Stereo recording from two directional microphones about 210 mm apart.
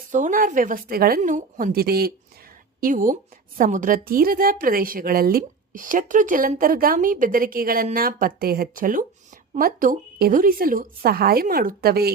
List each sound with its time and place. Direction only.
0.1 s a woman's voice: 40° right (ahead or behind)